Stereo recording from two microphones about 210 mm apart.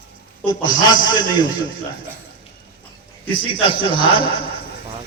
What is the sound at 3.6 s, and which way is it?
Speech, 25° left (ahead or behind).